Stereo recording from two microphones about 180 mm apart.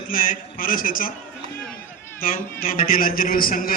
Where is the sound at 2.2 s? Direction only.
50° left (ahead or behind).